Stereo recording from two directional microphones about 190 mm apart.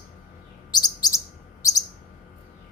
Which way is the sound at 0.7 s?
20° left (ahead or behind).